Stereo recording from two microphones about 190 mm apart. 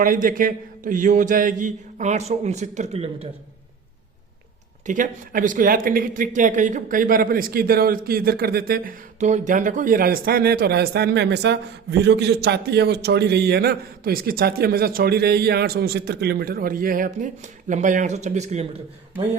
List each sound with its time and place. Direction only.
0.0 s speech: 45° right (ahead or behind)
4.9 s speech: 45° right (ahead or behind)